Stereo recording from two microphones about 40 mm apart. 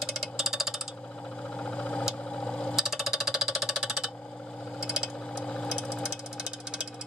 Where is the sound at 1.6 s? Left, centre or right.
Left.